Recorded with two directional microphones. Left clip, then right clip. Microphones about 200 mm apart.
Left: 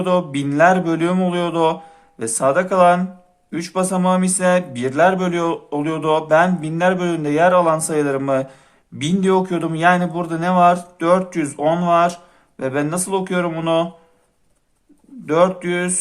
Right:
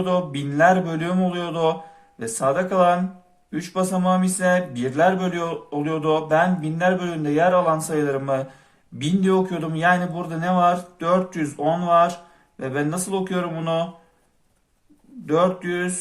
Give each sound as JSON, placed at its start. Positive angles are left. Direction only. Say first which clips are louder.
{"t": 0.0, "sound": "speech", "louder": "left 4 dB", "side_deg": 35}
{"t": 15.3, "sound": "speech", "louder": "left 4 dB", "side_deg": 35}